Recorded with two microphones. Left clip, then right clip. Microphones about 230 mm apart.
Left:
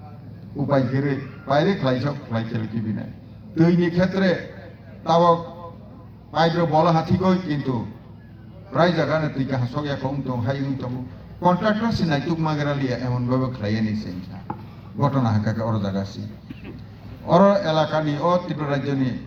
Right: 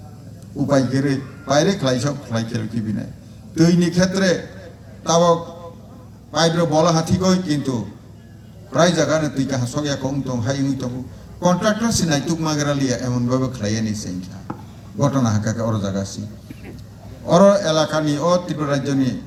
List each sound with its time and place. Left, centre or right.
0.7 s a man's voice: right
17.2 s a man's voice: right